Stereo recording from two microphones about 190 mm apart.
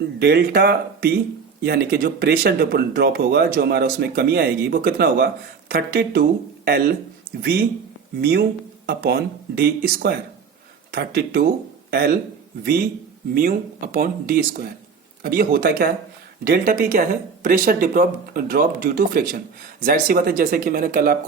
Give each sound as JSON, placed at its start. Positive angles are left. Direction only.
{"t": 0.2, "sound": "speech", "side_deg": -60}